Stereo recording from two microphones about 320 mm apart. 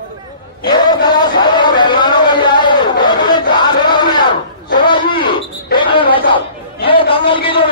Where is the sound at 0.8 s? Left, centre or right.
Centre.